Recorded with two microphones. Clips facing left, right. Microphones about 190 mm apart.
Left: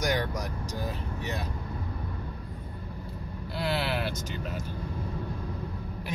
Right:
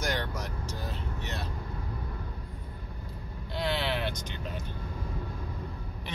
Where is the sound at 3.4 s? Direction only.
5° left (ahead or behind).